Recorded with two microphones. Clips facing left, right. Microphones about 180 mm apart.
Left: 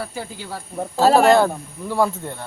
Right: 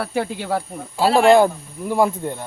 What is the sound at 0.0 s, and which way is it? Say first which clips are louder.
Speech: right 7 dB; 65° right (ahead or behind).